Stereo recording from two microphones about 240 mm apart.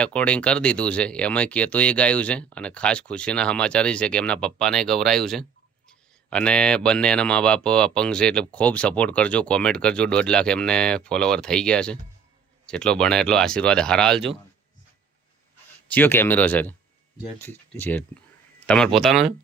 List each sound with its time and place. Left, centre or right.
0.0 s speech: centre
15.9 s speech: centre